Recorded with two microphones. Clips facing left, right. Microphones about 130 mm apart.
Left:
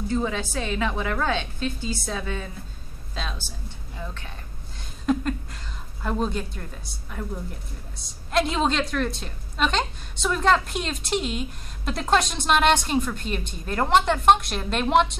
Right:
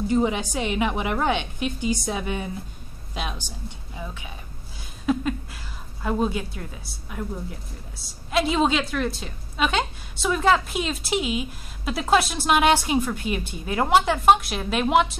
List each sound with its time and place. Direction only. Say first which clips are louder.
0.1 s a woman's voice: right 3 dB; 15° right (ahead or behind)
4.0 s a sound: right 1 dB; 10° right (ahead or behind)
6.0 s a woman's voice: right 2 dB; 5° right (ahead or behind)